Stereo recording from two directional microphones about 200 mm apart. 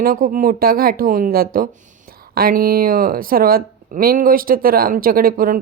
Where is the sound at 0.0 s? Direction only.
45° right (ahead or behind).